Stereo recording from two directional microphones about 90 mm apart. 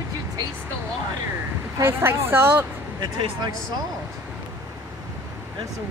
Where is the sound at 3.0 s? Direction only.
60° right (ahead or behind).